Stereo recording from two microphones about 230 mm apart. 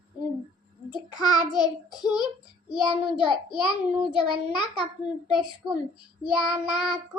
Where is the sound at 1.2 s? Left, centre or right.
Centre.